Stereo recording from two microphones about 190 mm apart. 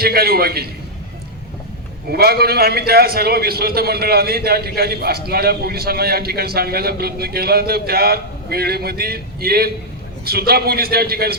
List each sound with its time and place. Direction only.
0.0 s a man's voice: 55° right (ahead or behind)
2.0 s a man's voice: 55° right (ahead or behind)